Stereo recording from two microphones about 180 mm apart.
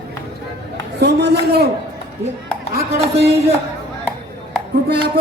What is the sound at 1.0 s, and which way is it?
Music, 65° right (ahead or behind).